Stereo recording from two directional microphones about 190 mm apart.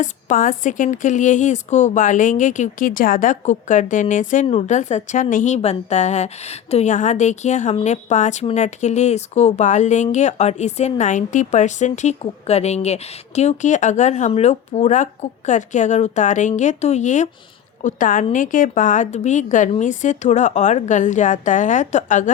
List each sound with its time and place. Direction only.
0.0 s speech: 40° left (ahead or behind)